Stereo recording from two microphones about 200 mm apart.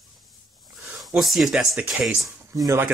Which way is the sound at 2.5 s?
15° right (ahead or behind).